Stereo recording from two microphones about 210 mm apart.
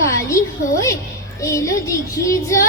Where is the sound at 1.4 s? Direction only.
15° left (ahead or behind).